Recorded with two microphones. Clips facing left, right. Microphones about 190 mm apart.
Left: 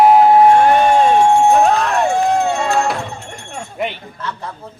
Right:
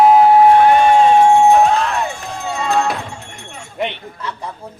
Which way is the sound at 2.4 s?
55° left (ahead or behind).